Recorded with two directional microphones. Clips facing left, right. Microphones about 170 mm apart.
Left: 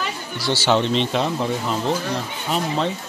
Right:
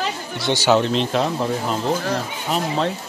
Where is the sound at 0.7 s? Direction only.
Centre (ahead or behind).